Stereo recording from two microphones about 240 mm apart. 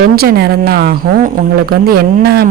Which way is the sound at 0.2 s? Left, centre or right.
Right.